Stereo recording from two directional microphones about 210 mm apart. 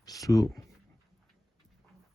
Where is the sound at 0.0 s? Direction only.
15° left (ahead or behind).